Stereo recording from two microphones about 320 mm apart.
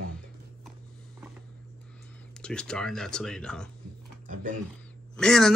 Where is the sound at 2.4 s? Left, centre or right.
Centre.